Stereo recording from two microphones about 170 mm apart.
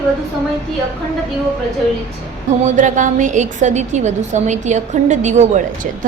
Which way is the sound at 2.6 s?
45° right (ahead or behind).